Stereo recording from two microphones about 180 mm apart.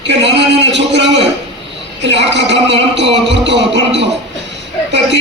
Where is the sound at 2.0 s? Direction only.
75° right (ahead or behind).